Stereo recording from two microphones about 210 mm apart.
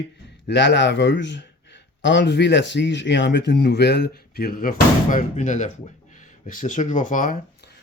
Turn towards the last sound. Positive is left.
turn(degrees=40)  # may be behind; listen again after turning